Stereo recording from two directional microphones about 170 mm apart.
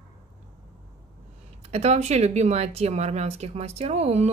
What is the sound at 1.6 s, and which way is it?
Speech, 40° right (ahead or behind).